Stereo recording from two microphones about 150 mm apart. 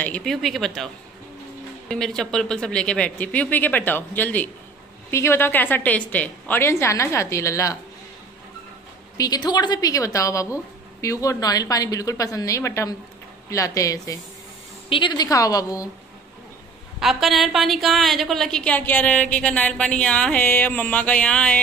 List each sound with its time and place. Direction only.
0.0 s speech: 5° left (ahead or behind)
1.9 s a woman's voice: 5° left (ahead or behind); by 7.7 s 20° left (ahead or behind)
9.1 s a woman's voice: 25° left (ahead or behind)
14.9 s a woman's voice: 30° left (ahead or behind)
17.0 s a woman's voice: centre (ahead or behind)